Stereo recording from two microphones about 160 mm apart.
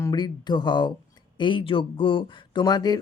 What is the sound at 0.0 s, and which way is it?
Speech, 25° left (ahead or behind).